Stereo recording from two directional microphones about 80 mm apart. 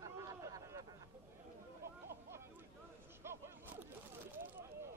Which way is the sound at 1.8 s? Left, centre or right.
Right.